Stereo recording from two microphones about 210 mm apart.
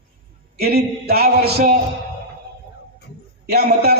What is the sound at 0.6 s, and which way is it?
A man's voice, 45° right (ahead or behind).